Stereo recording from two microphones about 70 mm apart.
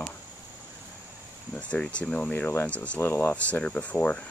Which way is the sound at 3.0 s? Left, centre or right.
Left.